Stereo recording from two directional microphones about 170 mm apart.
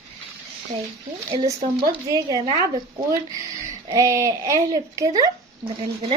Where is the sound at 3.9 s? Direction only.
20° right (ahead or behind).